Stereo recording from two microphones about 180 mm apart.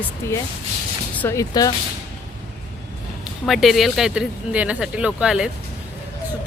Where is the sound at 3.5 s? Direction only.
Centre (ahead or behind).